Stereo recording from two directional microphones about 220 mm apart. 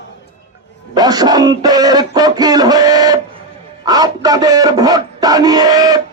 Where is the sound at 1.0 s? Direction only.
15° right (ahead or behind).